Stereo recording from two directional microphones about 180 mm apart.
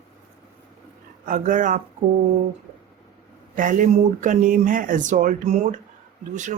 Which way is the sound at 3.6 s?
45° right (ahead or behind).